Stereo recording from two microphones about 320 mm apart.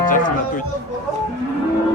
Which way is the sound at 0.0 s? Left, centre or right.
Left.